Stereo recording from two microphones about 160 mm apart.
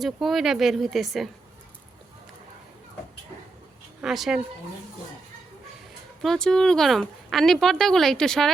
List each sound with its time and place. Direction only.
0.0 s a woman's voice: centre (ahead or behind)
4.0 s a woman's voice: centre (ahead or behind)
6.2 s a woman's voice: 5° left (ahead or behind)